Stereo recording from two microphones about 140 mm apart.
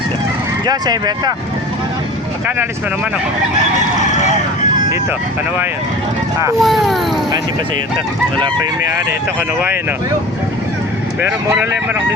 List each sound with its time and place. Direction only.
0.6 s speech: 30° right (ahead or behind)
6.6 s speech: centre (ahead or behind)
11.5 s speech: 15° right (ahead or behind)